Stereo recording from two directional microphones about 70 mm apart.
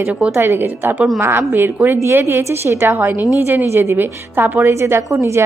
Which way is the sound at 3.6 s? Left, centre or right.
Right.